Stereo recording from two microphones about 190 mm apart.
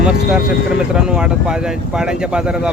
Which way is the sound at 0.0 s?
5° right (ahead or behind).